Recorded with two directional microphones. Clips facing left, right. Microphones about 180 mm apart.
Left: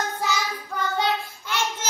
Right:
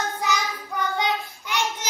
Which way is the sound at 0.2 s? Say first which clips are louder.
Right 1 dB; 15° right (ahead or behind).